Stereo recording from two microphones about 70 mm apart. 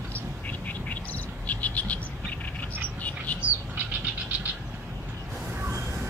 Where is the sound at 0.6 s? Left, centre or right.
Left.